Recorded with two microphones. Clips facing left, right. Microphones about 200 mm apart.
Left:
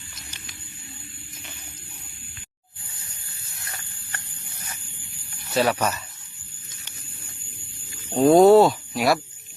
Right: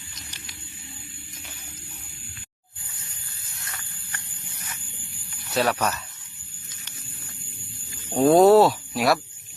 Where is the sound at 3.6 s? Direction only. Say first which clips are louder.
Left 1 dB; 30° left (ahead or behind).